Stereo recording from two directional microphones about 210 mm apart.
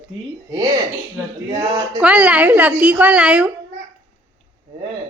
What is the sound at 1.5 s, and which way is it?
Speech, 15° right (ahead or behind).